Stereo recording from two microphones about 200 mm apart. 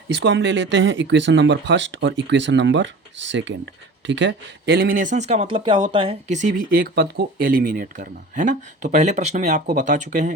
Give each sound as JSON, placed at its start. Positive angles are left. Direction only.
{"t": 0.1, "sound": "speech", "side_deg": -60}